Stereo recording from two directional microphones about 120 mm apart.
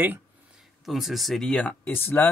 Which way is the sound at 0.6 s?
Centre (ahead or behind).